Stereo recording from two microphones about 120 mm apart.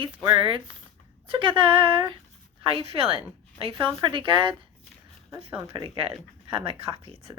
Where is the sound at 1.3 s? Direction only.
45° right (ahead or behind).